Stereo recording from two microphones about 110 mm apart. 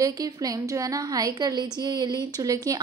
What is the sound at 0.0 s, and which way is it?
Speech, 35° right (ahead or behind).